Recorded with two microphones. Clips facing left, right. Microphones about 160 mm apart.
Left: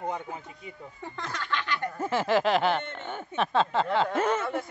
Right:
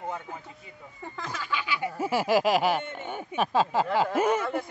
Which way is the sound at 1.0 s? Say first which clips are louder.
Even; 5° right (ahead or behind).